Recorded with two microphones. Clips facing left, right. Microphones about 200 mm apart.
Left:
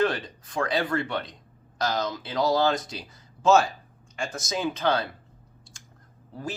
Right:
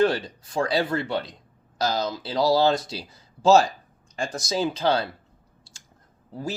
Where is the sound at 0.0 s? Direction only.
30° right (ahead or behind).